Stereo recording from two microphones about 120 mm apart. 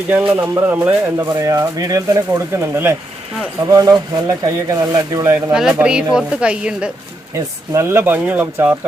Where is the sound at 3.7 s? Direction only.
30° right (ahead or behind).